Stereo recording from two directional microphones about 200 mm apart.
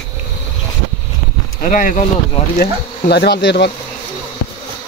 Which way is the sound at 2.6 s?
55° left (ahead or behind).